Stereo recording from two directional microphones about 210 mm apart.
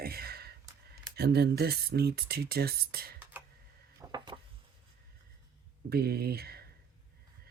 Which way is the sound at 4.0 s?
20° right (ahead or behind).